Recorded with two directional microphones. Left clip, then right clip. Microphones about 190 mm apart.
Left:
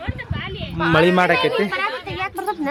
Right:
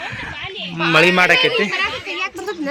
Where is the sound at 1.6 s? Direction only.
15° left (ahead or behind).